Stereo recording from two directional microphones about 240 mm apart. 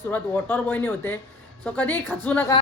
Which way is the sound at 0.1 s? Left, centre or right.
Centre.